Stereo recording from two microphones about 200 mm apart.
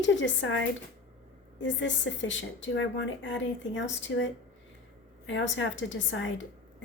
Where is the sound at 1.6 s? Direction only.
70° left (ahead or behind).